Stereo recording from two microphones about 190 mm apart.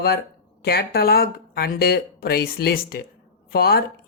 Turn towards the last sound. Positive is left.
turn(degrees=55)  # may be behind; listen again after turning